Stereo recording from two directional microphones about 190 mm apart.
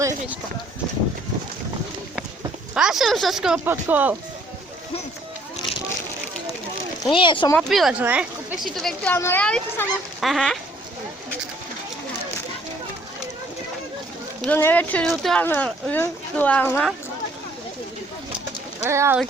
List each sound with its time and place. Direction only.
2.7 s speech: centre (ahead or behind)
7.0 s speech: 25° left (ahead or behind)
7.5 s speech: centre (ahead or behind)
14.4 s speech: 10° left (ahead or behind)
18.8 s speech: 15° right (ahead or behind)